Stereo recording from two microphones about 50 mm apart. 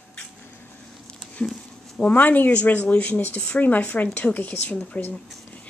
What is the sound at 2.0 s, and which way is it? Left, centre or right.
Speech, left.